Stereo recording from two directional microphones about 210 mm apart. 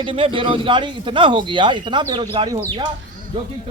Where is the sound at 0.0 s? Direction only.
25° right (ahead or behind).